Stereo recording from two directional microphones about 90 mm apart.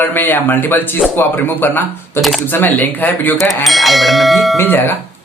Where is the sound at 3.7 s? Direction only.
Centre (ahead or behind).